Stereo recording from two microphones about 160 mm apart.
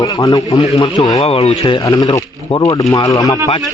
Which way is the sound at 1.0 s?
40° left (ahead or behind).